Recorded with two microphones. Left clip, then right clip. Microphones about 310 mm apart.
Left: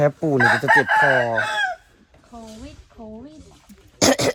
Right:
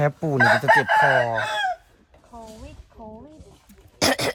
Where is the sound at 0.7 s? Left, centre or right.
Right.